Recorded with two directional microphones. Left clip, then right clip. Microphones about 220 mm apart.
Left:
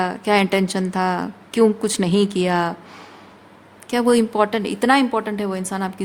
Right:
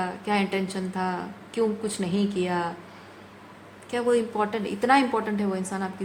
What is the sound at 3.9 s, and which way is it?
A woman's voice, 45° left (ahead or behind).